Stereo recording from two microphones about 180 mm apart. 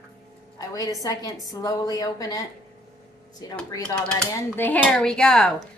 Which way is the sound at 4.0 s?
5° left (ahead or behind).